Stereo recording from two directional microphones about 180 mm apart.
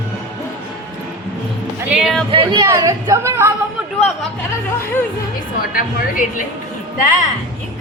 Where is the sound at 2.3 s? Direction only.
30° right (ahead or behind).